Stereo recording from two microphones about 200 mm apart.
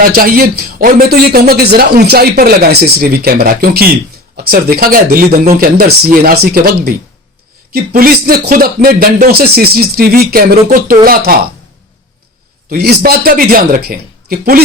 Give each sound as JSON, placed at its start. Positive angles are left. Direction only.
{"t": 0.2, "sound": "a man's voice", "side_deg": -45}
{"t": 12.7, "sound": "a man's voice", "side_deg": -50}